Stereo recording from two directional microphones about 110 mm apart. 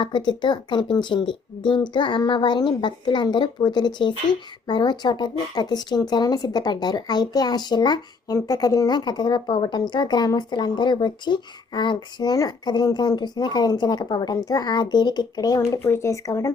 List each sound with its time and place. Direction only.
0.0 s speech: 45° left (ahead or behind)